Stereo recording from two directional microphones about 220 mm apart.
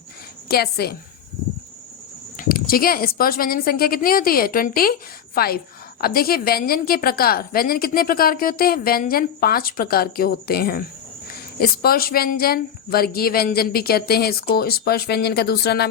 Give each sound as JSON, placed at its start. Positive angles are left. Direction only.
{"t": 0.4, "sound": "a woman's voice", "side_deg": 45}
{"t": 2.4, "sound": "a woman's voice", "side_deg": 40}